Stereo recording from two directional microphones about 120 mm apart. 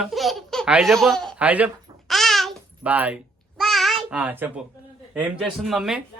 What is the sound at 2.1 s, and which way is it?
Babbling, centre (ahead or behind).